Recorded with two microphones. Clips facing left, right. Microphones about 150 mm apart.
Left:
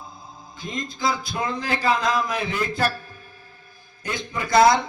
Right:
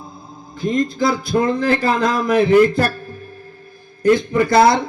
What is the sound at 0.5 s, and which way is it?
Speech, 50° right (ahead or behind).